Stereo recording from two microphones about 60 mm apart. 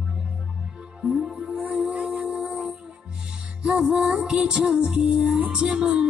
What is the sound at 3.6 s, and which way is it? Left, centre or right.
Music, centre.